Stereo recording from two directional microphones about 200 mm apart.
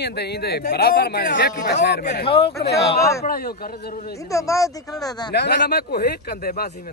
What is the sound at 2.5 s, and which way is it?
A man's voice, 55° left (ahead or behind).